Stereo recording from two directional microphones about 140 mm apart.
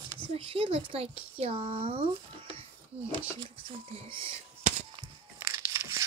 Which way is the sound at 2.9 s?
10° right (ahead or behind).